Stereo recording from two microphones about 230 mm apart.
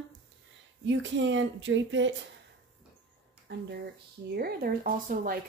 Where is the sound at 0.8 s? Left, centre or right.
Right.